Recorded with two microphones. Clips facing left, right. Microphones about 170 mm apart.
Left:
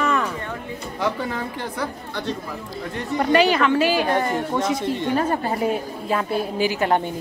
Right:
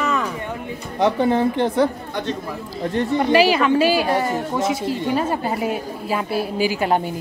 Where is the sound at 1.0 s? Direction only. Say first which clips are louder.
Right 8 dB; 20° right (ahead or behind).